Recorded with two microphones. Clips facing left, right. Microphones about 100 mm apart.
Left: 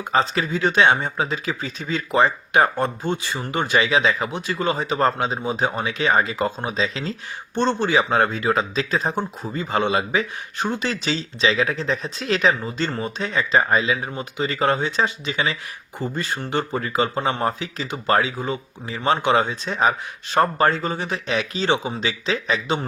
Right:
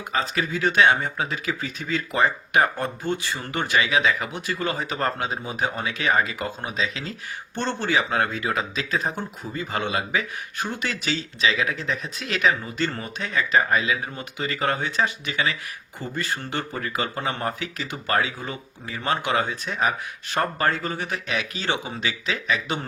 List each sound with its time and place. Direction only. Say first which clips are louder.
0.1 s speech: left 5 dB; 30° left (ahead or behind)
7.5 s speech: left 5 dB; 20° left (ahead or behind)